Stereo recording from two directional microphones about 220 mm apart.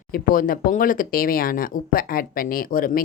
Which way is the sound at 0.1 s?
40° left (ahead or behind).